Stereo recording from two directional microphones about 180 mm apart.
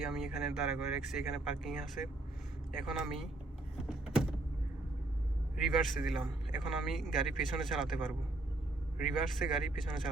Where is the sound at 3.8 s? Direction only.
5° right (ahead or behind).